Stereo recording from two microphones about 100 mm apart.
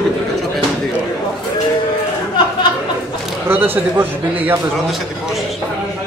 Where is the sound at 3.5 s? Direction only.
20° right (ahead or behind).